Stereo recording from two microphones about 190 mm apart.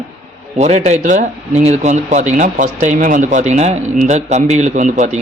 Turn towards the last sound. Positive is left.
turn(degrees=-40)  # may be behind; listen again after turning